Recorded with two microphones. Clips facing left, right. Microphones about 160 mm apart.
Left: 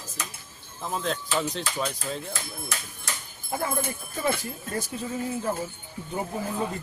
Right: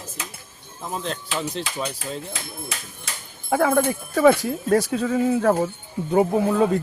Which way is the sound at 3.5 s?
90° right.